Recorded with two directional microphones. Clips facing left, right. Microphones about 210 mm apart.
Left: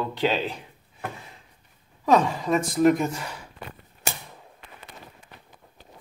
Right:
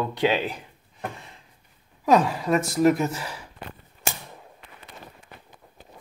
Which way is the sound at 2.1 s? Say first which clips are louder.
Right 1 dB; 5° right (ahead or behind).